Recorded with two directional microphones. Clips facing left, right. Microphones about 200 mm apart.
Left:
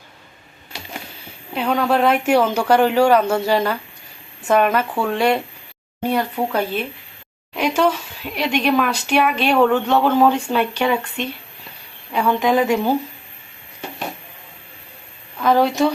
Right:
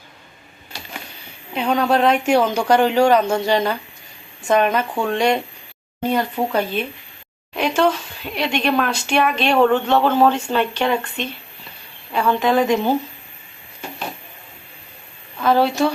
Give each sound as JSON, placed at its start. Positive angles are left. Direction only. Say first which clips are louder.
{"t": 1.5, "sound": "speech", "louder": "even", "side_deg": 0}
{"t": 15.4, "sound": "a woman's voice", "louder": "left 1 dB", "side_deg": -5}
{"t": 15.6, "sound": "speech", "louder": "left 1 dB", "side_deg": 15}